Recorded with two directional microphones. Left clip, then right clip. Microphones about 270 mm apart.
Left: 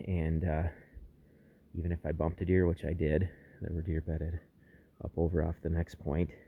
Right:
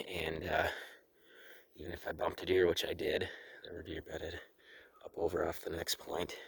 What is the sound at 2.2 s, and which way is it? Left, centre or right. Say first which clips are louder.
Speech: right 1 dB; centre.